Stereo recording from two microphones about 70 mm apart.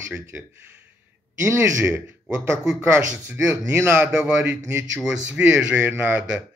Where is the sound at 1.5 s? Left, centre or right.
Right.